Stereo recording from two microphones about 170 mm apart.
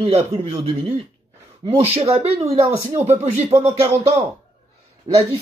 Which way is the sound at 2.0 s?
35° right (ahead or behind).